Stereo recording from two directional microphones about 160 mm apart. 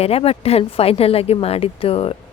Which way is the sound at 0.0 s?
40° left (ahead or behind).